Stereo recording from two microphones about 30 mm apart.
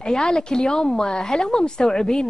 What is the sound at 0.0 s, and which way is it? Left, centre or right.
Speech, left.